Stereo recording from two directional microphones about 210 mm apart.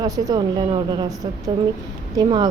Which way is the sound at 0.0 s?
20° right (ahead or behind).